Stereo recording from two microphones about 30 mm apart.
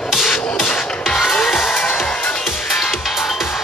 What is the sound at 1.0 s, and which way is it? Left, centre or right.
Music, centre.